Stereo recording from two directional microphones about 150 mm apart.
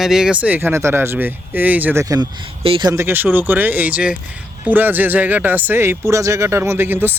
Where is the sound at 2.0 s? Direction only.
25° right (ahead or behind).